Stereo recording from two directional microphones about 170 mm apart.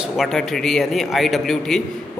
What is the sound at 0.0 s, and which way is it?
Speech, centre (ahead or behind).